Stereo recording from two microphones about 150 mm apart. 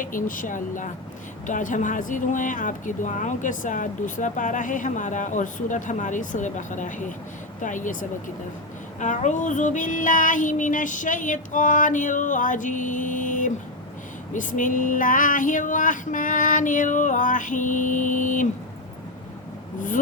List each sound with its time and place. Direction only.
0.0 s a woman's voice: 65° left (ahead or behind)